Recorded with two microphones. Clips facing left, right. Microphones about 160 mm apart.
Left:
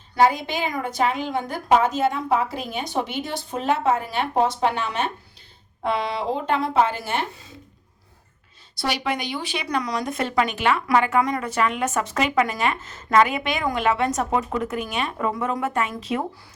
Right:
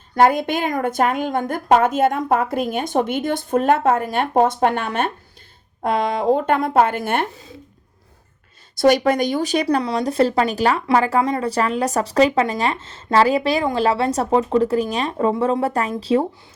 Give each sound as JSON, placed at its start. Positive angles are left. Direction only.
{"t": 0.2, "sound": "a woman's voice", "side_deg": -55}
{"t": 8.7, "sound": "speech", "side_deg": -45}